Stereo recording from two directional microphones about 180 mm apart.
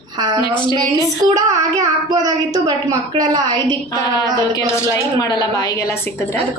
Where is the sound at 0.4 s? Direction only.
25° left (ahead or behind).